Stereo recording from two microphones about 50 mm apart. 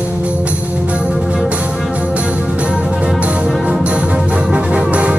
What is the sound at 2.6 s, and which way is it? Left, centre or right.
Music, right.